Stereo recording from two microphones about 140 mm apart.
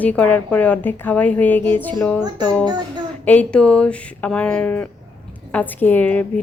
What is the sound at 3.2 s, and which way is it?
A woman's voice, 10° left (ahead or behind).